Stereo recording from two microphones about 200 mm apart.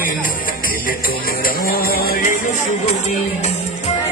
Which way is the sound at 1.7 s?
50° left (ahead or behind).